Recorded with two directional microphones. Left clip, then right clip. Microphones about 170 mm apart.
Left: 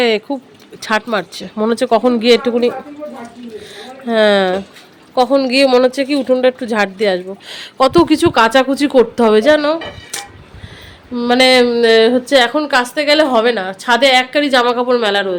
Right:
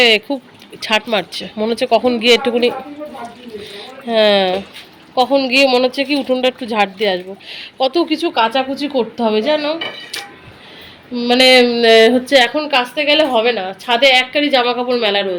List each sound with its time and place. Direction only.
0.0 s speech: 10° left (ahead or behind)
4.0 s a woman's voice: 20° left (ahead or behind)
7.8 s speech: 45° left (ahead or behind)
11.1 s a woman's voice: 20° left (ahead or behind)